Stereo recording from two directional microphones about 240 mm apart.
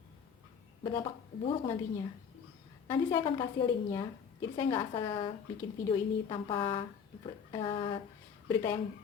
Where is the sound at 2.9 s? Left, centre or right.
Centre.